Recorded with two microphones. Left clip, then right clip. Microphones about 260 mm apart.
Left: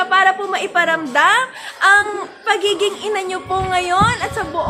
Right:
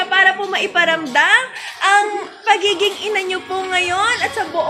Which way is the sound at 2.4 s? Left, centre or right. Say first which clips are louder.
Right 2 dB; centre.